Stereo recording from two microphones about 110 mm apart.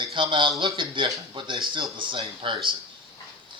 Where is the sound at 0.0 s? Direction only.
50° right (ahead or behind).